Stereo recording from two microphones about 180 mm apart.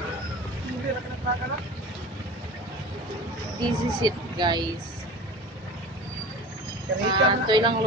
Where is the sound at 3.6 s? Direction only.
25° right (ahead or behind).